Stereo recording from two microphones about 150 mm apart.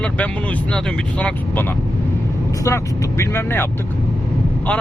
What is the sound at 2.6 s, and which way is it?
Speech, 20° left (ahead or behind).